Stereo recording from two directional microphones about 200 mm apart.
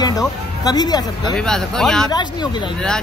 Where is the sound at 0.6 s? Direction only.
20° left (ahead or behind).